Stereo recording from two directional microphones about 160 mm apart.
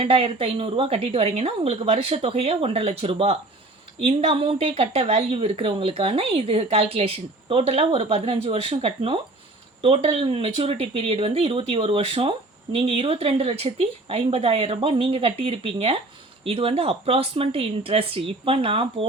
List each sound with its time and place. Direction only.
0.0 s speech: 35° right (ahead or behind)